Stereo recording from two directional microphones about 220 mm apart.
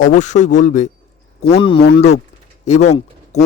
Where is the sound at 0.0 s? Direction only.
35° left (ahead or behind).